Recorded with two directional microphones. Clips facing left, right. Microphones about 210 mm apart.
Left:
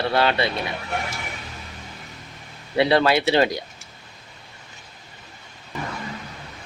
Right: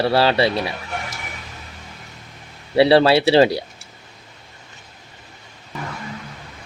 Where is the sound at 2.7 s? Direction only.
30° right (ahead or behind).